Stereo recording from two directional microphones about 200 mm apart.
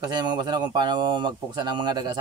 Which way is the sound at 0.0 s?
20° right (ahead or behind).